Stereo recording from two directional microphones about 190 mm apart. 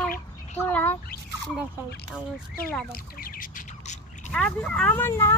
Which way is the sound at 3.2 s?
45° left (ahead or behind).